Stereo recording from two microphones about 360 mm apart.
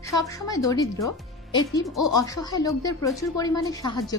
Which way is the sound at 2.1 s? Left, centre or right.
Centre.